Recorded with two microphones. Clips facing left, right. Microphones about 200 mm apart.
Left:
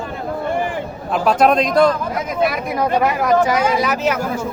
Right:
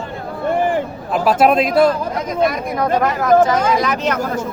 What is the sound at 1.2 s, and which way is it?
Speech, 5° right (ahead or behind).